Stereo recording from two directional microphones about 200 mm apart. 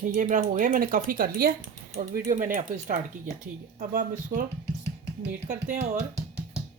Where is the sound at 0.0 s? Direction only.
40° right (ahead or behind).